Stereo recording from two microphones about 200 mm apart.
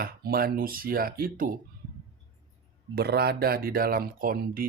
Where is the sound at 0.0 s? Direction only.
50° right (ahead or behind).